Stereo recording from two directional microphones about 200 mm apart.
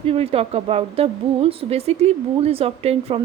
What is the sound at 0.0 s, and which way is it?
Speech, 30° right (ahead or behind).